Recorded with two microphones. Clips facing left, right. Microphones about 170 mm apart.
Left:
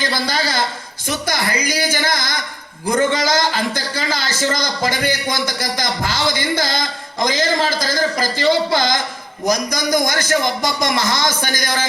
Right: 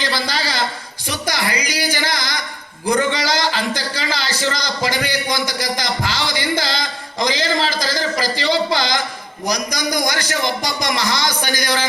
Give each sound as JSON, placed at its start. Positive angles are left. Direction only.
{"t": 0.0, "sound": "a man's voice", "side_deg": 45}